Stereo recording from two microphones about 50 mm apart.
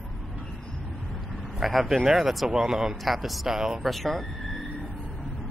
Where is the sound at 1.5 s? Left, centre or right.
Centre.